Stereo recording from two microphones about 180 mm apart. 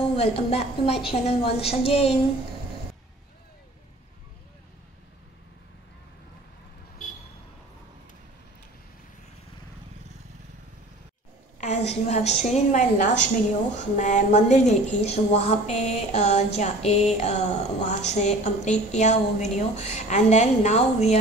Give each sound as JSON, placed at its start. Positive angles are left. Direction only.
{"t": 0.1, "sound": "a woman's voice", "side_deg": 35}
{"t": 11.6, "sound": "a woman's voice", "side_deg": 40}